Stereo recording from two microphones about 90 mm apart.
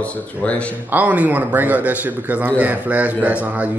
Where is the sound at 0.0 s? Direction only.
15° left (ahead or behind).